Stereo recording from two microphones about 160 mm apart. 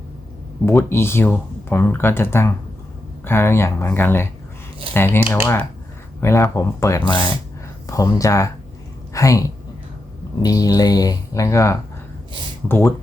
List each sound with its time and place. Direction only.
0.6 s speech: 15° left (ahead or behind)
10.4 s speech: 25° left (ahead or behind)